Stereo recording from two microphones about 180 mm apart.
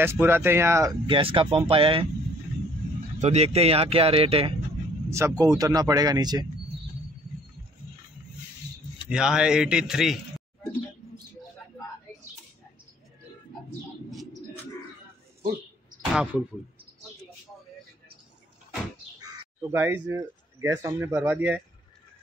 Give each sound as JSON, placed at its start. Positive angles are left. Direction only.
{"t": 0.0, "sound": "speech", "side_deg": -10}
{"t": 1.0, "sound": "speech", "side_deg": -30}
{"t": 3.2, "sound": "speech", "side_deg": -40}
{"t": 5.1, "sound": "speech", "side_deg": -20}
{"t": 9.1, "sound": "a man's voice", "side_deg": -5}
{"t": 16.1, "sound": "a man's voice", "side_deg": -5}
{"t": 19.7, "sound": "speech", "side_deg": -15}